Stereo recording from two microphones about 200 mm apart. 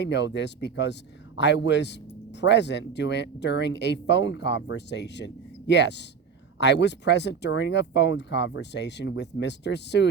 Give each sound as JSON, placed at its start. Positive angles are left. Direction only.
{"t": 0.0, "sound": "speech", "side_deg": 60}